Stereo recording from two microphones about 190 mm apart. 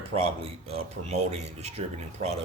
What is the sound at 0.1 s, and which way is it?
Speech, 30° right (ahead or behind).